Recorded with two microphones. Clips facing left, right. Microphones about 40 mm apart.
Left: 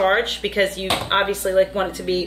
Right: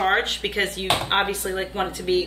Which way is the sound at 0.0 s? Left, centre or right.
Centre.